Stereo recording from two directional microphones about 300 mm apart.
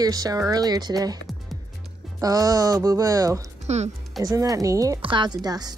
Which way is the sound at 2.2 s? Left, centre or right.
Centre.